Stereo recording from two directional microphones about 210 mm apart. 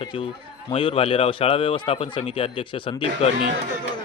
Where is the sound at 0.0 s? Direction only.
25° left (ahead or behind).